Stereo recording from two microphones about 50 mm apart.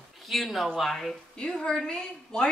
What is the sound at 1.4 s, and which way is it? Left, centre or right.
Speech, centre.